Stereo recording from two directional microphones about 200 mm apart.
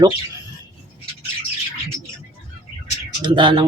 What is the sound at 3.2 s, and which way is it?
Speech, 25° right (ahead or behind).